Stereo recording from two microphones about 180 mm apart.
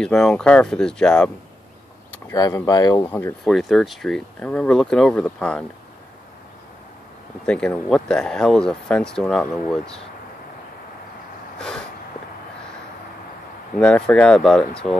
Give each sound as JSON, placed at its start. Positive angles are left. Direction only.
{"t": 0.0, "sound": "speech", "side_deg": 5}
{"t": 2.2, "sound": "speech", "side_deg": 15}
{"t": 3.4, "sound": "speech", "side_deg": 0}
{"t": 7.4, "sound": "speech", "side_deg": 5}
{"t": 11.5, "sound": "a sound", "side_deg": 5}
{"t": 13.7, "sound": "speech", "side_deg": 5}